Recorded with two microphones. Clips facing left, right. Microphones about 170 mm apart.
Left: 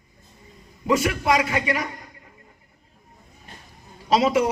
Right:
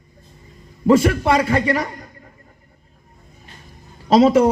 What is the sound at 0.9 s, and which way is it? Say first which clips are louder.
A man's voice: right 6 dB; 30° right (ahead or behind).